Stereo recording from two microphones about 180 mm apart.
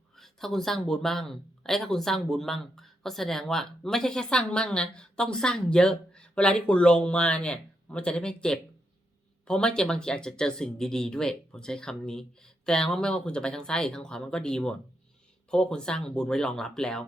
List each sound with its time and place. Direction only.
0.2 s speech: centre (ahead or behind)